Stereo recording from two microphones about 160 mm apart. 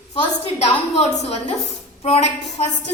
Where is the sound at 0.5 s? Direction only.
45° left (ahead or behind).